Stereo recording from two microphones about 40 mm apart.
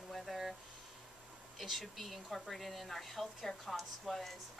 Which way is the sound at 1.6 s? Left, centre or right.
Centre.